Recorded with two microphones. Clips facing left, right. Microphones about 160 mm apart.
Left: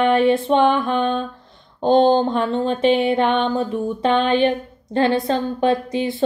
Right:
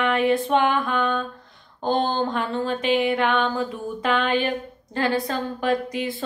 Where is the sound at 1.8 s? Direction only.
30° left (ahead or behind).